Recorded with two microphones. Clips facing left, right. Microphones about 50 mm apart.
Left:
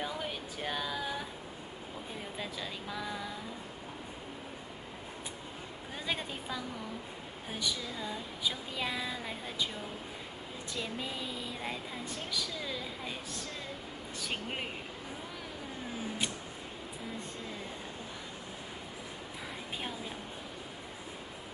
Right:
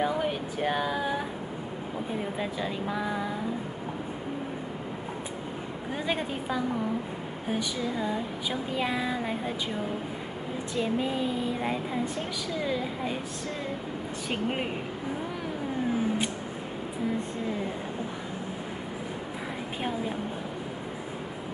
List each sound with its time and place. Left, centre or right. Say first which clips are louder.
0.0 s speech: right 10 dB; right
0.3 s a sound: right 9 dB; right
2.3 s speech: right 9 dB; right
6.0 s speech: right 6 dB; right
7.8 s speech: right 10 dB; right
10.8 s speech: right 11 dB; right
14.3 s speech: right 9 dB; centre